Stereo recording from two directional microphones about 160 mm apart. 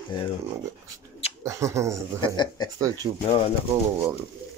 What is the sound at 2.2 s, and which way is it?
Speech, 30° left (ahead or behind).